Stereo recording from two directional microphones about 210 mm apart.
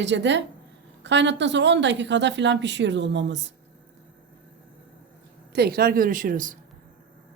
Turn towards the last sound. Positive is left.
turn(degrees=-40)  # may be behind; listen again after turning